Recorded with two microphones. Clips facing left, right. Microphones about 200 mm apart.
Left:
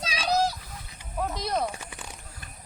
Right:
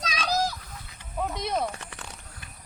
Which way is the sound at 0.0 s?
30° left (ahead or behind).